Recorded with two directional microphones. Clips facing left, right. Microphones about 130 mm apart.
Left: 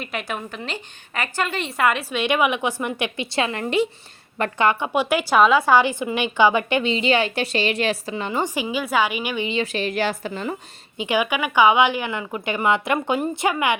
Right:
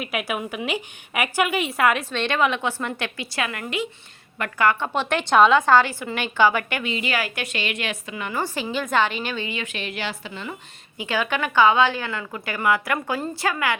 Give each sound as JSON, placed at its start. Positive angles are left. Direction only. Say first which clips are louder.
{"t": 0.0, "sound": "a woman's voice", "louder": "right 2 dB", "side_deg": -5}
{"t": 2.0, "sound": "a woman's voice", "louder": "left 2 dB", "side_deg": 10}
{"t": 9.5, "sound": "a woman's voice", "louder": "left 7 dB", "side_deg": 35}
{"t": 10.9, "sound": "a woman's voice", "louder": "left 3 dB", "side_deg": 15}